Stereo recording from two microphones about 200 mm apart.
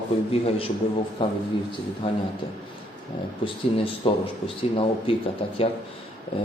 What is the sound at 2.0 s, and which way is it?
Speech, 25° left (ahead or behind).